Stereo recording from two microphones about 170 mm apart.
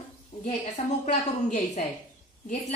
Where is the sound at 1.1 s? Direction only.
45° left (ahead or behind).